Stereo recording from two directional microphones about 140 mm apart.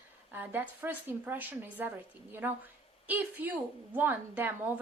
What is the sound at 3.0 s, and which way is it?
A woman's voice, 10° right (ahead or behind).